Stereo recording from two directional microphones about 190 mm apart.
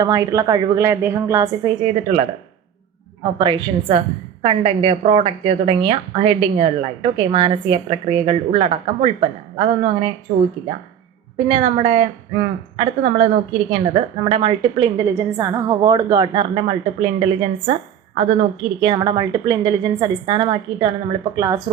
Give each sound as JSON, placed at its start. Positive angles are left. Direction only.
{"t": 0.0, "sound": "a woman's voice", "side_deg": -15}
{"t": 2.1, "sound": "speech", "side_deg": -30}
{"t": 3.3, "sound": "a woman's voice", "side_deg": -25}
{"t": 18.8, "sound": "a woman's voice", "side_deg": -25}